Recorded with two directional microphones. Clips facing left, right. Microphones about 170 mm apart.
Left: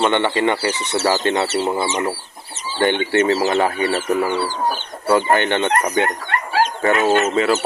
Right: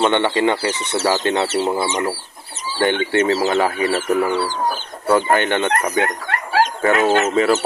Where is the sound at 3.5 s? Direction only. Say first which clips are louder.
Even; centre (ahead or behind).